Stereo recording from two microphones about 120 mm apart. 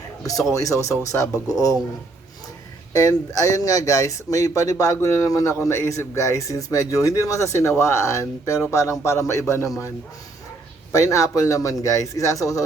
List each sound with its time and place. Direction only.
0.2 s a man's voice: 30° left (ahead or behind)
2.9 s speech: 30° left (ahead or behind)
10.9 s speech: 25° left (ahead or behind)